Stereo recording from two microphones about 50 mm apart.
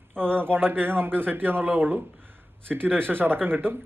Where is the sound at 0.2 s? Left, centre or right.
Right.